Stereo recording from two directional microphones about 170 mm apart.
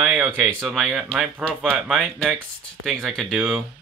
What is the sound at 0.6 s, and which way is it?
Speech, centre (ahead or behind).